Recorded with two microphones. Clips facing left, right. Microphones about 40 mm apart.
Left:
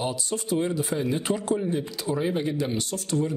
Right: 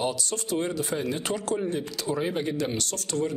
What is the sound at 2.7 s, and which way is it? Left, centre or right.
Speech, centre.